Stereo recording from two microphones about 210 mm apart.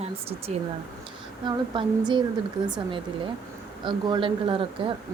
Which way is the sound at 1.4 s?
20° right (ahead or behind).